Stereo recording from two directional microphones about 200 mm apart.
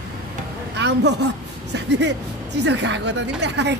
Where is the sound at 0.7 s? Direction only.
60° right (ahead or behind).